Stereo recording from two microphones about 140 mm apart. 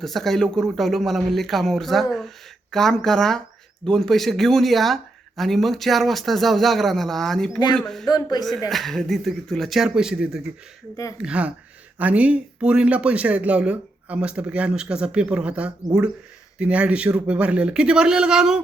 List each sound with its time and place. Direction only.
0.0 s speech: centre (ahead or behind)
8.0 s speech: 30° left (ahead or behind)
8.7 s speech: centre (ahead or behind)